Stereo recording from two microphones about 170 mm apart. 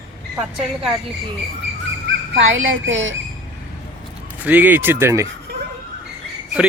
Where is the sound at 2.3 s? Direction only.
90° right.